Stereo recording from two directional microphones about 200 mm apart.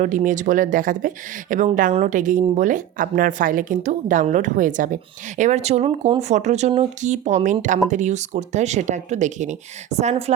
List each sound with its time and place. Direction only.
0.0 s speech: 40° right (ahead or behind)